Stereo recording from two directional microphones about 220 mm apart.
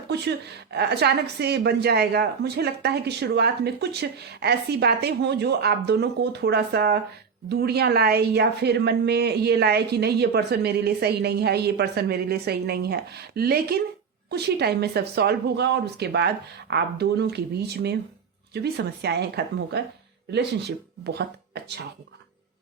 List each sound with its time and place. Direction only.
0.1 s a woman's voice: 50° right (ahead or behind)